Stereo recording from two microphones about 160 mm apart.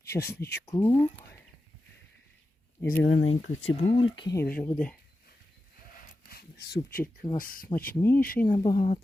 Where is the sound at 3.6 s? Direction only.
40° left (ahead or behind).